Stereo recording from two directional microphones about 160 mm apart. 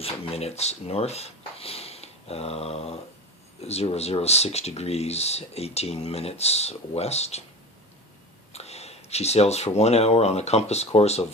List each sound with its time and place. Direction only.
0.0 s speech: 40° left (ahead or behind)
8.5 s speech: 40° left (ahead or behind)